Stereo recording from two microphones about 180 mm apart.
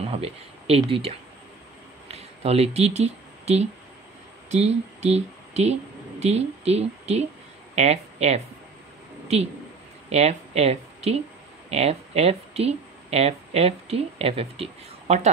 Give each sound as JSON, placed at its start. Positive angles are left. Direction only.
{"t": 0.0, "sound": "speech", "side_deg": -35}
{"t": 2.0, "sound": "a sound", "side_deg": -35}
{"t": 4.5, "sound": "speech", "side_deg": -35}
{"t": 10.0, "sound": "speech", "side_deg": -35}